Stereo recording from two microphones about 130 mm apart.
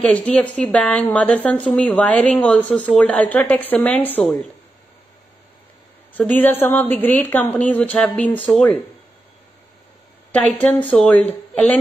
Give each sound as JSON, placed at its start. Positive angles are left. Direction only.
{"t": 0.0, "sound": "a woman's voice", "side_deg": 10}
{"t": 6.1, "sound": "a woman's voice", "side_deg": 15}
{"t": 10.3, "sound": "a woman's voice", "side_deg": 10}